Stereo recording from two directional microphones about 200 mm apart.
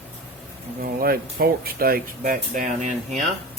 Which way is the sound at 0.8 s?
45° right (ahead or behind).